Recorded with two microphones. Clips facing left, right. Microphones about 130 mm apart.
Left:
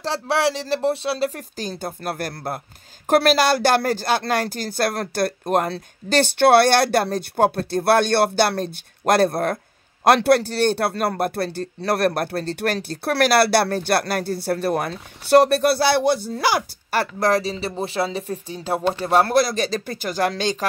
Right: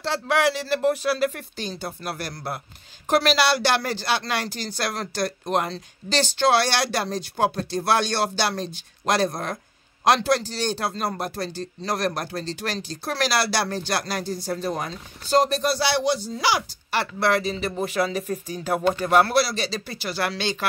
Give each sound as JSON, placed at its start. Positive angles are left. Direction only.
{"t": 0.0, "sound": "speech", "side_deg": 35}